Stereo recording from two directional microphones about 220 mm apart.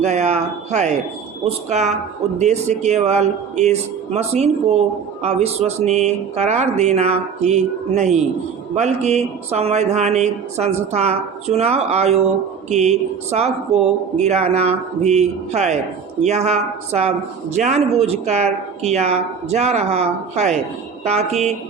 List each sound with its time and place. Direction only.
0.0 s speech: 30° right (ahead or behind)